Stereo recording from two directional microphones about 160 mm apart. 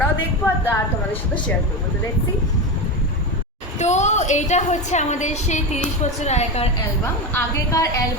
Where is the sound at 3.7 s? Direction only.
45° left (ahead or behind).